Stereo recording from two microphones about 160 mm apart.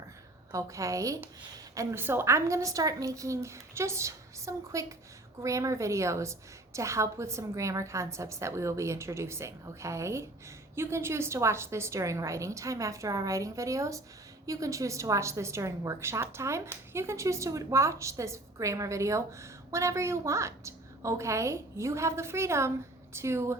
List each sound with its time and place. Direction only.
0.5 s a woman's voice: 20° right (ahead or behind)